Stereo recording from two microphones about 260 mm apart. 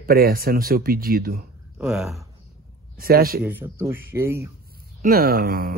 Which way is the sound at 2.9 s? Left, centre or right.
Right.